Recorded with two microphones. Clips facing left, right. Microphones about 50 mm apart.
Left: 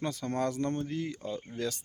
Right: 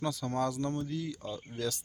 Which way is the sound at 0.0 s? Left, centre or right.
Left.